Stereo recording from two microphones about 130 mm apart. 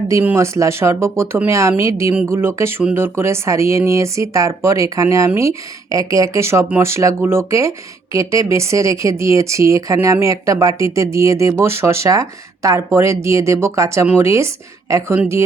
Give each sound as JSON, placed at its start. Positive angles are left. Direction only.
{"t": 0.3, "sound": "speech", "side_deg": -20}